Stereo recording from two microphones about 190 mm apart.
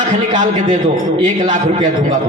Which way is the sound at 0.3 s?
40° right (ahead or behind).